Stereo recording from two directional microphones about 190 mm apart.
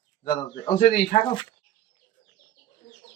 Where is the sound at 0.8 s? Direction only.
40° left (ahead or behind).